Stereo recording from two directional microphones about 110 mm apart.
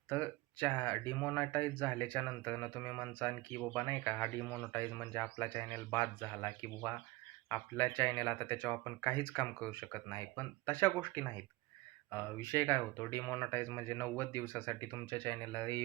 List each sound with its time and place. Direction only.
0.1 s speech: 15° left (ahead or behind)